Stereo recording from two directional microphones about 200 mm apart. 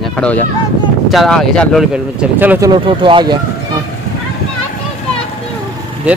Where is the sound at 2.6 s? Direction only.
25° right (ahead or behind).